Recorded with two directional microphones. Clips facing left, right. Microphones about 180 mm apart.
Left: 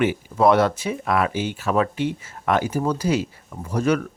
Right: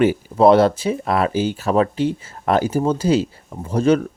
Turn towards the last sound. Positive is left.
turn(degrees=-30)  # may be behind; listen again after turning